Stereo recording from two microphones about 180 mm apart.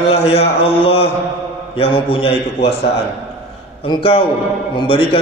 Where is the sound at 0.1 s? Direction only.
35° left (ahead or behind).